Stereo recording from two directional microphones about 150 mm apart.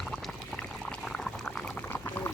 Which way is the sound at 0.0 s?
Centre (ahead or behind).